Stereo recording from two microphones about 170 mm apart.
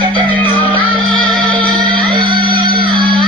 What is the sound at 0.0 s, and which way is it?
Music, 30° right (ahead or behind).